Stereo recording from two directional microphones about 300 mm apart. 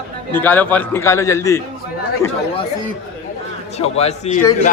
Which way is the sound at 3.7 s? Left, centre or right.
Left.